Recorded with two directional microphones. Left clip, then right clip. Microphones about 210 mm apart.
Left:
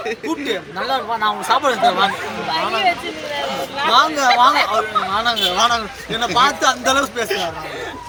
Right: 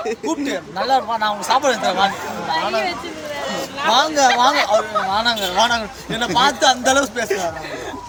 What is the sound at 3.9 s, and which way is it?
Speech, 20° right (ahead or behind).